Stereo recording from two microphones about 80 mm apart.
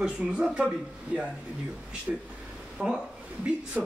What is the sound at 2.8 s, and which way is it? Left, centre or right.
Speech, centre.